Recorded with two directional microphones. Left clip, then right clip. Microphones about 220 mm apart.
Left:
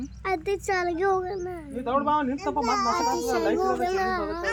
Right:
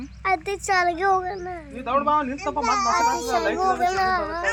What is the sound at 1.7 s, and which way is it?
A man's voice, 40° left (ahead or behind).